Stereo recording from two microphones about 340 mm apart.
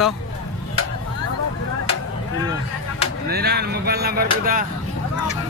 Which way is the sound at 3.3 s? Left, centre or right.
Right.